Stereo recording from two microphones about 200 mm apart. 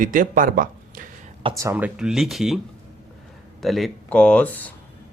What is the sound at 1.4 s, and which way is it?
Speech, 25° right (ahead or behind).